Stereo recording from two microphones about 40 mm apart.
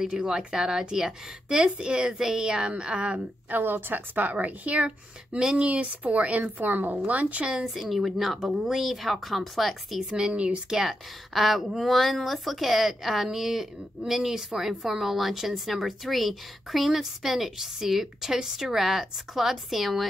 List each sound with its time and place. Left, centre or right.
0.0 s a woman's voice: centre
2.7 s a woman's voice: right
3.4 s a woman's voice: right
5.4 s speech: right
5.7 s a woman's voice: right
7.1 s a woman's voice: right
7.5 s a woman's voice: centre
10.0 s a woman's voice: centre
10.3 s speech: right
10.7 s a woman's voice: centre